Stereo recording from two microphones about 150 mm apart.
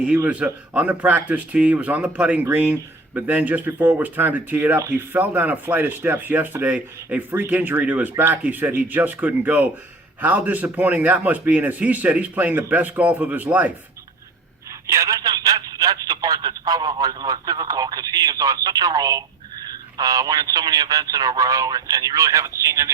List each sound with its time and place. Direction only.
0.0 s speech: 10° right (ahead or behind)
14.8 s speech: 20° right (ahead or behind)